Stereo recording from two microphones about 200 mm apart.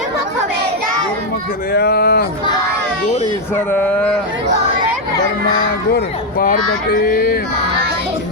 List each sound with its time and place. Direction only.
1.7 s speech: 50° left (ahead or behind)
3.5 s a sound: 10° left (ahead or behind)
6.8 s speech: 50° left (ahead or behind)